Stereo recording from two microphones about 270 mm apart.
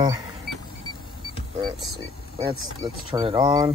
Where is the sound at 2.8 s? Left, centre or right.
Centre.